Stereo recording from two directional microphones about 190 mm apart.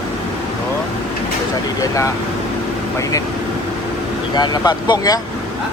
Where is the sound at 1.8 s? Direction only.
15° left (ahead or behind).